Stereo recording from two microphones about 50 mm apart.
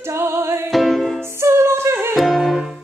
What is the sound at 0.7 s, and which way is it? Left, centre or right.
Music, centre.